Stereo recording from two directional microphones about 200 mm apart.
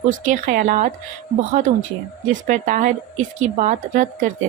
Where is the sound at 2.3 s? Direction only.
40° right (ahead or behind).